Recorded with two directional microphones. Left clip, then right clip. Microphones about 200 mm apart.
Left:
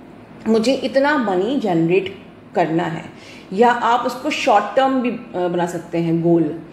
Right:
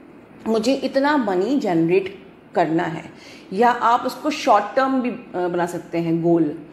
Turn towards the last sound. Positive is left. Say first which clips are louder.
# left 2 dB
turn(degrees=-15)  # may be behind; listen again after turning